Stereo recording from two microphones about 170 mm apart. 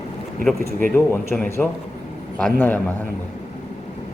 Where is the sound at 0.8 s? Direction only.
10° left (ahead or behind).